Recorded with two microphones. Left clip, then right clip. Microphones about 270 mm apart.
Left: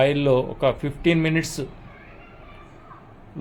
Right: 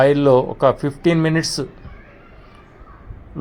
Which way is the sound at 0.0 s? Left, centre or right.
Right.